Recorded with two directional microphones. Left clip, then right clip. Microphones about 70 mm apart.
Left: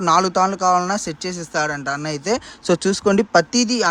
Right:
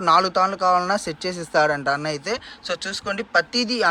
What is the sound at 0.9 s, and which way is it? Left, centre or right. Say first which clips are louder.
Speech: even; left.